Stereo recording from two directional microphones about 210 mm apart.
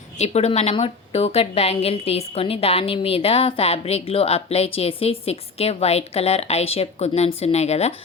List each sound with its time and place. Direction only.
0.2 s a woman's voice: 30° left (ahead or behind)